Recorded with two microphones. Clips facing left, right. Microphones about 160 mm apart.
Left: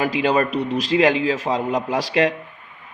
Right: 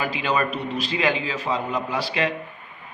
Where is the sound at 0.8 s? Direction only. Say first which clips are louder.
Left 7 dB; 90° left.